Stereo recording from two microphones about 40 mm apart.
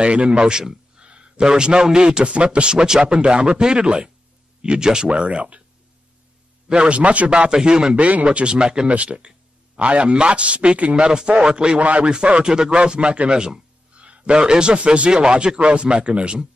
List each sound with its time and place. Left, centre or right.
0.0 s a man's voice: right
1.0 s a sound: right
1.4 s a man's voice: centre
6.7 s a man's voice: right
7.9 s a man's voice: right
8.3 s a man's voice: right
11.8 s a man's voice: right
12.1 s a man's voice: right